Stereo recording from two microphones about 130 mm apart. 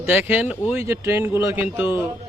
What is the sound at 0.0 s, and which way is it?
A man's voice, 15° right (ahead or behind).